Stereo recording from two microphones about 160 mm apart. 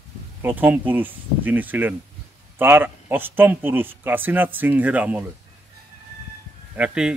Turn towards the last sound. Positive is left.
turn(degrees=-5)  # may be behind; listen again after turning